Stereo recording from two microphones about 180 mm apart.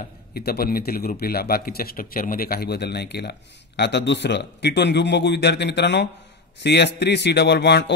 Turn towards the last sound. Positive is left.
turn(degrees=70)  # may be behind; listen again after turning